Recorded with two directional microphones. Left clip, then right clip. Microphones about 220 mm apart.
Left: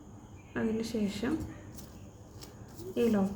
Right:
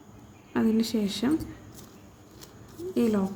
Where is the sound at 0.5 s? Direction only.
45° right (ahead or behind).